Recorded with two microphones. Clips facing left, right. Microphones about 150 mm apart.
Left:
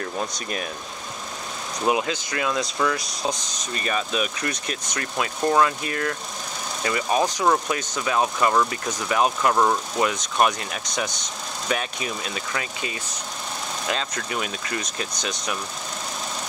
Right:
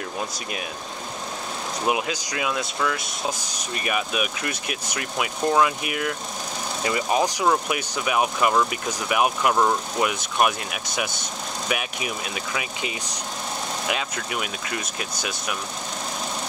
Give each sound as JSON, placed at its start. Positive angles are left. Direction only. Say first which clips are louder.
{"t": 1.9, "sound": "speech", "louder": "left 2 dB", "side_deg": -15}
{"t": 9.6, "sound": "speech", "louder": "left 1 dB", "side_deg": 0}
{"t": 10.0, "sound": "speech", "louder": "left 1 dB", "side_deg": -10}